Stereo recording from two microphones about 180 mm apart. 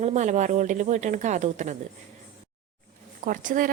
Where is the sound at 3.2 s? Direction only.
45° right (ahead or behind).